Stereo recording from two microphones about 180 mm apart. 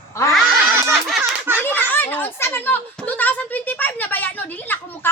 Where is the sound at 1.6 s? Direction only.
10° left (ahead or behind).